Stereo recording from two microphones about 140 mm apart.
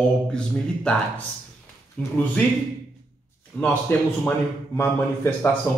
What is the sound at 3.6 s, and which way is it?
Speech, 15° left (ahead or behind).